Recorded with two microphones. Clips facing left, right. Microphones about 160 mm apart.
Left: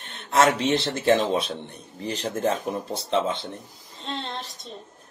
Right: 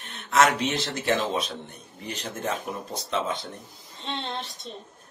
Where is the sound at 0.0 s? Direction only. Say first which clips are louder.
Left 1 dB; 30° left (ahead or behind).